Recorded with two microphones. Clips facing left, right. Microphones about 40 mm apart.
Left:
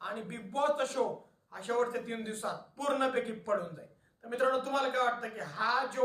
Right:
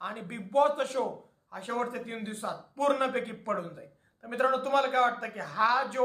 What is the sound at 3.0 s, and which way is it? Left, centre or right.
A man's voice, right.